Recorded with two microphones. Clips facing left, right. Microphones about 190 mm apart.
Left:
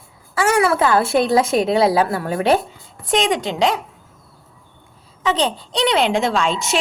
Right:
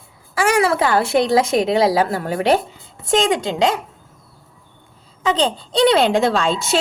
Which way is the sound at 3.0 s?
30° right (ahead or behind).